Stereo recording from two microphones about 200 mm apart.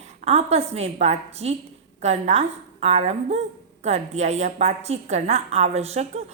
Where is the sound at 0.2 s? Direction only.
30° right (ahead or behind).